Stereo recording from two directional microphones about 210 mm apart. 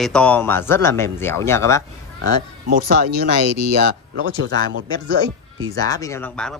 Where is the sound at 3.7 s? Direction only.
50° right (ahead or behind).